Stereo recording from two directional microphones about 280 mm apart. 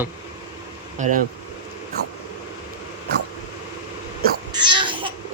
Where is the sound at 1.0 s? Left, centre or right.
Right.